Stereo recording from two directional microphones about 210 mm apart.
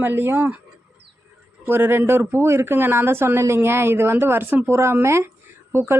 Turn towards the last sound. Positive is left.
turn(degrees=-10)  # may be behind; listen again after turning